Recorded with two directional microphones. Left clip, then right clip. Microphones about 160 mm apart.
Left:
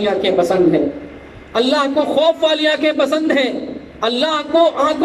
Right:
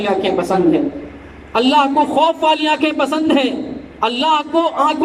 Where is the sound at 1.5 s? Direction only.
15° right (ahead or behind).